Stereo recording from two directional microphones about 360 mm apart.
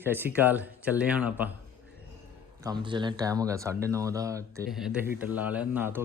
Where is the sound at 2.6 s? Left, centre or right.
Centre.